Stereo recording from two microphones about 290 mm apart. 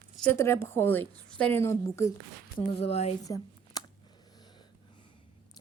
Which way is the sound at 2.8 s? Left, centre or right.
Left.